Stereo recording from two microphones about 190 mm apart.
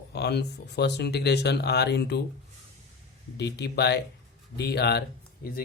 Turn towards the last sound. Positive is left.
turn(degrees=55)  # may be behind; listen again after turning